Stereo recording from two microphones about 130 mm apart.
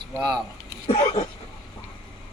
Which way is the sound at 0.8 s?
45° left (ahead or behind).